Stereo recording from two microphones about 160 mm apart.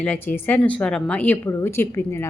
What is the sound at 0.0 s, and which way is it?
A woman's voice, 10° left (ahead or behind).